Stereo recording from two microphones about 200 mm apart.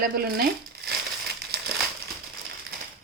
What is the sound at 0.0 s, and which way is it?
Speech, 50° right (ahead or behind).